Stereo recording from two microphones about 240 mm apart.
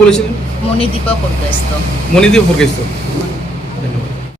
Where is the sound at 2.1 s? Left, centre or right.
Centre.